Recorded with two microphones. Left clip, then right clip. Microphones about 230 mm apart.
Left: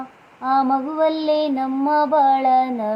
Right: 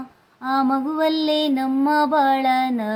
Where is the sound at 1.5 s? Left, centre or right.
Right.